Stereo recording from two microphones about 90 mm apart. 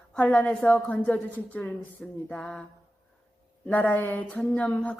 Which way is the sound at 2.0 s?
5° left (ahead or behind).